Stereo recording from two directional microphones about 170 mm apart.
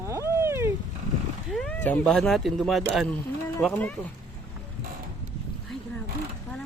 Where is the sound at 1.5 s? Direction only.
10° left (ahead or behind).